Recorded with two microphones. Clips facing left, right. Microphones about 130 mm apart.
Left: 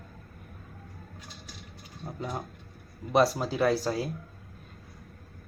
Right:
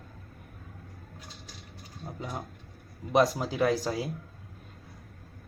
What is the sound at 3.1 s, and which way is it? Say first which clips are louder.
Speech: even; 15° right (ahead or behind).